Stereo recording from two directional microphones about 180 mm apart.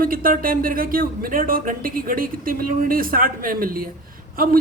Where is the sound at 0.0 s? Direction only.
50° right (ahead or behind).